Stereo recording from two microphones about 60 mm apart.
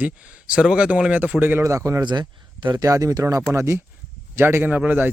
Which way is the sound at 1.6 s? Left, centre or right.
Right.